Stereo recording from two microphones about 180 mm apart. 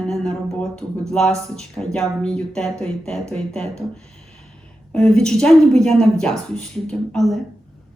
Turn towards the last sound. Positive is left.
turn(degrees=0)  # may be behind; listen again after turning